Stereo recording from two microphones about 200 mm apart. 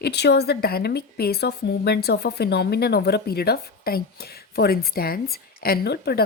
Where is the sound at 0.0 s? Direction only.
55° left (ahead or behind).